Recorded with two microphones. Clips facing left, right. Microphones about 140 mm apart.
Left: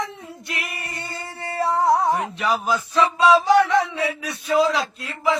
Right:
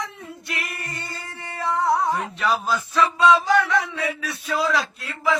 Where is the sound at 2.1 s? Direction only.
15° left (ahead or behind).